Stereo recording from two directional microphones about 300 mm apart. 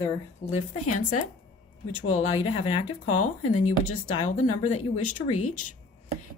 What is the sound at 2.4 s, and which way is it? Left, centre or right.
Speech, left.